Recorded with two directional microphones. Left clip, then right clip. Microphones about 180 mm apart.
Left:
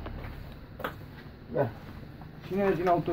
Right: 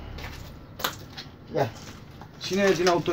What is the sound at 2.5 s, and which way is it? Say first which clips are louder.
Speech: right 4 dB; 30° right (ahead or behind).